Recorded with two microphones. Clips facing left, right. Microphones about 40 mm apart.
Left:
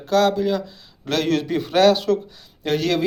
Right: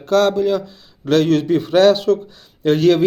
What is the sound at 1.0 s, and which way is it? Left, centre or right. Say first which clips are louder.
Speech: right 6 dB; centre.